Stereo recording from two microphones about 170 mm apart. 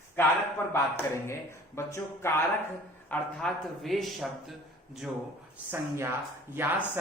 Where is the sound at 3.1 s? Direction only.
5° left (ahead or behind).